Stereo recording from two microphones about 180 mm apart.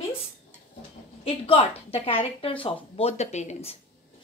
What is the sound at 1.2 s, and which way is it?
A woman's voice, 30° left (ahead or behind).